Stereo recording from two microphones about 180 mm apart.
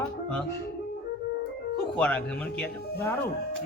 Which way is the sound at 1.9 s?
5° left (ahead or behind).